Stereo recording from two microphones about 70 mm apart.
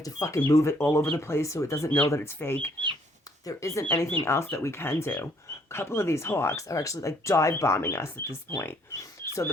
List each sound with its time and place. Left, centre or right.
0.0 s speech: left
0.5 s speech: left
3.4 s speech: left
6.7 s speech: left
8.9 s a sound: left